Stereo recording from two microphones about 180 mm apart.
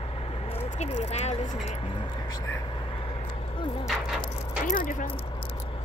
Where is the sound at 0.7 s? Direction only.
40° left (ahead or behind).